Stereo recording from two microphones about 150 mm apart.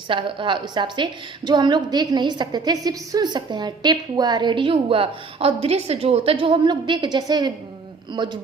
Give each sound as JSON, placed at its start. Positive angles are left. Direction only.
{"t": 0.1, "sound": "a woman's voice", "side_deg": -35}